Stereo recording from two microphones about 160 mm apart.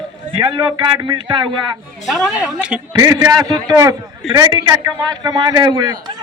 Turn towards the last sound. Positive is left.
turn(degrees=-30)  # may be behind; listen again after turning